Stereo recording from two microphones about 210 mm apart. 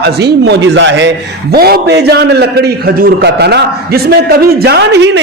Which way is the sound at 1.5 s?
50° right (ahead or behind).